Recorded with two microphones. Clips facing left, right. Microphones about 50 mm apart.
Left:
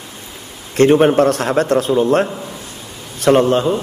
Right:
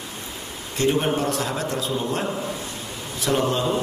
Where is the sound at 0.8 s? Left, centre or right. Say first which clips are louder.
Left 11 dB; left.